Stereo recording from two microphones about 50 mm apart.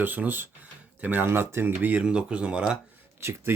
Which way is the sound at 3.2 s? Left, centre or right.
Right.